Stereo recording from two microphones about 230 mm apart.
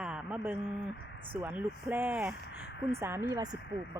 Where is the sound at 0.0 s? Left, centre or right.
Centre.